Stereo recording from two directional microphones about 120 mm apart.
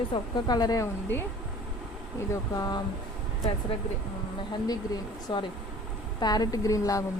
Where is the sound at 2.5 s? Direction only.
30° left (ahead or behind).